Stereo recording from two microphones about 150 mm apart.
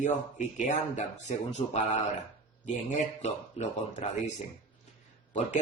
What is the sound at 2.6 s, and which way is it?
Speech, 50° left (ahead or behind).